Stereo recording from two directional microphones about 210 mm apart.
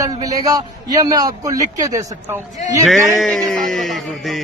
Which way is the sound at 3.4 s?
Centre (ahead or behind).